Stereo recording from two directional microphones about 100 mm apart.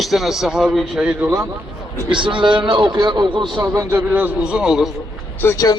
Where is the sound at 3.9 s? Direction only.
15° right (ahead or behind).